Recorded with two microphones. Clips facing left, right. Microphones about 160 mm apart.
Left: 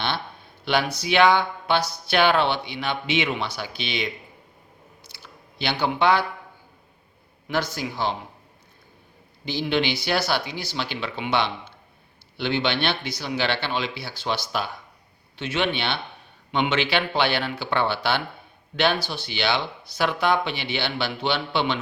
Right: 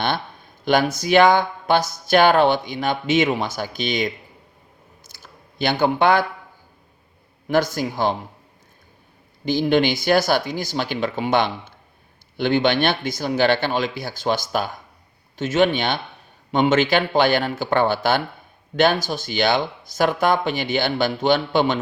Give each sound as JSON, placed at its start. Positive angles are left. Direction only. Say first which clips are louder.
{"t": 0.6, "sound": "speech", "louder": "right 5 dB", "side_deg": -45}
{"t": 5.0, "sound": "a sound", "louder": "right 1 dB", "side_deg": -45}
{"t": 7.4, "sound": "speech", "louder": "right 7 dB", "side_deg": -50}
{"t": 9.5, "sound": "speech", "louder": "right 6 dB", "side_deg": -50}